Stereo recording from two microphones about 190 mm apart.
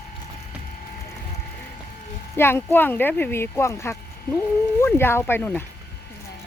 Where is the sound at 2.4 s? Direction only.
10° left (ahead or behind).